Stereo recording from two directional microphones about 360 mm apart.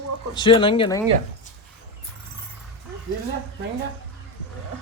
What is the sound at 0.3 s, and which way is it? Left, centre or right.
Speech, centre.